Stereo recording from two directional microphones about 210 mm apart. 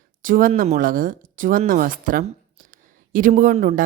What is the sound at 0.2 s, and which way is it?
A woman's voice, 40° right (ahead or behind).